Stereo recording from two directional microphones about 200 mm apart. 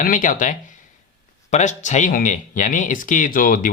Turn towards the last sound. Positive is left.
turn(degrees=45)  # may be behind; listen again after turning